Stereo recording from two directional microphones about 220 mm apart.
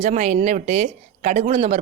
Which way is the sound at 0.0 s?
30° right (ahead or behind).